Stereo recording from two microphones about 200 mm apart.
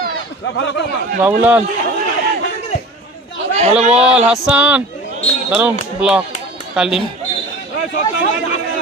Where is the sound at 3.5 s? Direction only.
35° right (ahead or behind).